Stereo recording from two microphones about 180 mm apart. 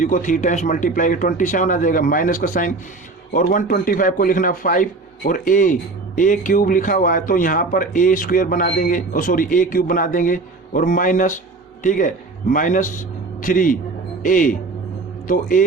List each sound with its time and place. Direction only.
0.0 s a man's voice: 45° left (ahead or behind)